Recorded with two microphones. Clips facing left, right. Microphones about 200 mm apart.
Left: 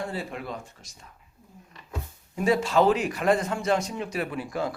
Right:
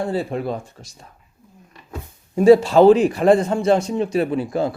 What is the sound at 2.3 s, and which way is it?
A man's voice, 30° right (ahead or behind).